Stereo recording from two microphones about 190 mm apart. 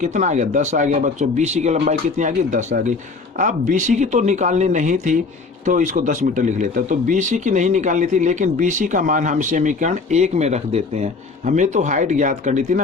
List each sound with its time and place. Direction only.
0.0 s speech: 40° right (ahead or behind)